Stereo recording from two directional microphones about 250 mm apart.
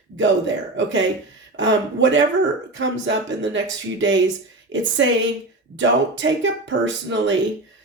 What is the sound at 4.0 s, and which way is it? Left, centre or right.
Speech, right.